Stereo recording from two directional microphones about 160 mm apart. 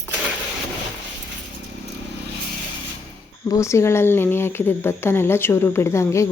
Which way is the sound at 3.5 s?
20° left (ahead or behind).